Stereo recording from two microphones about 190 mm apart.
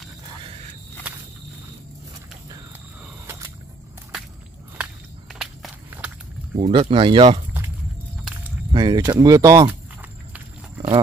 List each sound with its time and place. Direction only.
3.3 s a sound: 15° right (ahead or behind)
5.3 s walk: centre (ahead or behind)
6.5 s speech: 30° right (ahead or behind)
8.7 s speech: 20° right (ahead or behind)